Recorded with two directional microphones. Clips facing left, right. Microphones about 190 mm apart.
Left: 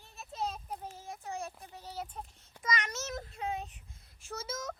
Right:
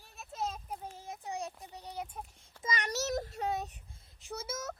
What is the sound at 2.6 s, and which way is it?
A child's voice, 30° right (ahead or behind).